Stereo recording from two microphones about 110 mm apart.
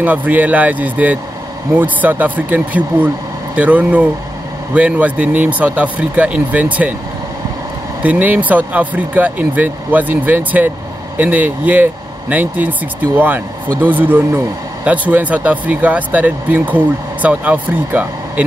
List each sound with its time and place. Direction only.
0.0 s speech: 15° right (ahead or behind)
8.0 s speech: 15° right (ahead or behind)